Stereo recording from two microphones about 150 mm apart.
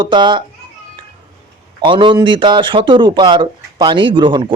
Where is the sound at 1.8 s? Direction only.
35° right (ahead or behind).